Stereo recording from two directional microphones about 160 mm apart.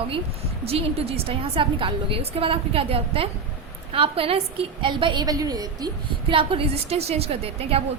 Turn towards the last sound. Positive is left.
turn(degrees=-40)  # may be behind; listen again after turning